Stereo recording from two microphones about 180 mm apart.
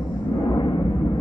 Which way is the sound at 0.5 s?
25° left (ahead or behind).